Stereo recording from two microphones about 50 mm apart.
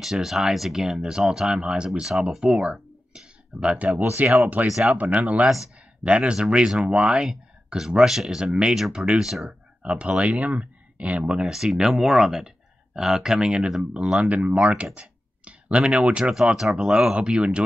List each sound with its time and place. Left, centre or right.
0.0 s speech: centre
1.5 s speech: centre; by 4.4 s right
4.6 s speech: centre
4.9 s speech: right; by 8.5 s centre
8.9 s speech: right
9.2 s speech: centre
9.5 s speech: right
11.5 s speech: centre; by 14.9 s right
15.0 s clicking: right
16.3 s speech: centre